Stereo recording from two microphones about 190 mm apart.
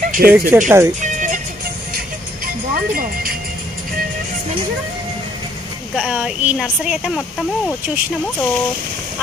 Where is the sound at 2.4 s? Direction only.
50° right (ahead or behind).